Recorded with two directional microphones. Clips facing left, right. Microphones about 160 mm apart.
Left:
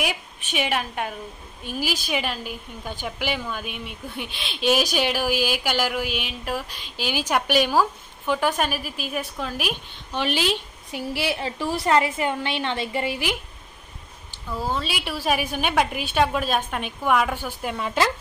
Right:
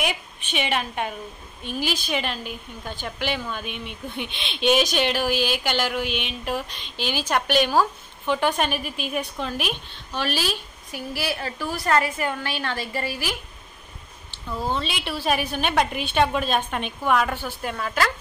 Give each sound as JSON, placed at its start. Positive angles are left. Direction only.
{"t": 0.5, "sound": "a woman's voice", "side_deg": 5}
{"t": 14.5, "sound": "a woman's voice", "side_deg": 5}
{"t": 17.8, "sound": "speech", "side_deg": 25}